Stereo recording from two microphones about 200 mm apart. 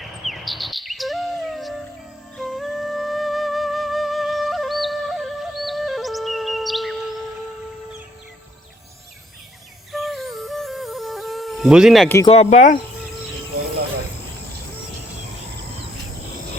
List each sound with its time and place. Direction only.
0.0 s chirp: centre (ahead or behind)
2.4 s music: centre (ahead or behind)
9.9 s music: centre (ahead or behind)
12.2 s speech: 30° left (ahead or behind)